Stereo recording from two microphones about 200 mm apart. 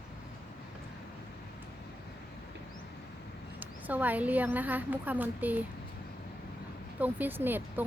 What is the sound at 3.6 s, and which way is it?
A woman's voice, 10° right (ahead or behind).